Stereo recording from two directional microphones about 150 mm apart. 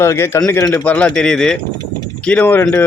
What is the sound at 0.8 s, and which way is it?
A man's voice, 10° left (ahead or behind).